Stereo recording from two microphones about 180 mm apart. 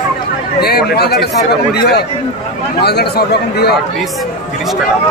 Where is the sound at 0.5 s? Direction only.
60° left (ahead or behind).